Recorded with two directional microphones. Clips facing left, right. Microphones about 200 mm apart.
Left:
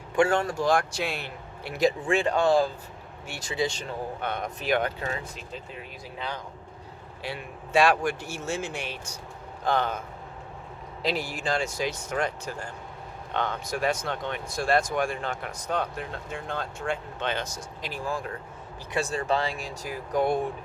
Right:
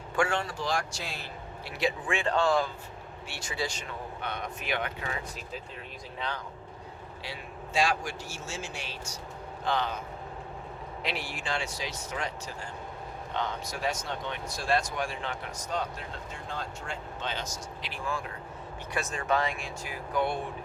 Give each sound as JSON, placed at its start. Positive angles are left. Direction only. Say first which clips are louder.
{"t": 0.3, "sound": "speech", "louder": "left 7 dB", "side_deg": 45}
{"t": 1.8, "sound": "speech", "louder": "left 7 dB", "side_deg": 35}
{"t": 2.2, "sound": "speech", "louder": "left 2 dB", "side_deg": 20}
{"t": 3.6, "sound": "speech", "louder": "left 6 dB", "side_deg": 20}
{"t": 4.2, "sound": "a man's voice", "louder": "left 3 dB", "side_deg": 50}
{"t": 4.6, "sound": "speech", "louder": "left 8 dB", "side_deg": 40}
{"t": 7.2, "sound": "a man's voice", "louder": "left 6 dB", "side_deg": 55}
{"t": 11.0, "sound": "speech", "louder": "left 7 dB", "side_deg": 40}
{"t": 13.3, "sound": "speech", "louder": "left 5 dB", "side_deg": 60}
{"t": 17.9, "sound": "speech", "louder": "left 4 dB", "side_deg": 40}